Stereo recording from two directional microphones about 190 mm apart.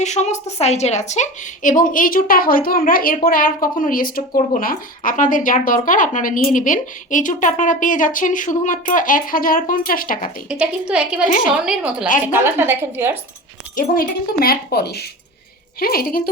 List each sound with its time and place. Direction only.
0.0 s a woman's voice: 40° left (ahead or behind)
10.5 s a woman's voice: 5° right (ahead or behind)
13.7 s a woman's voice: 50° left (ahead or behind)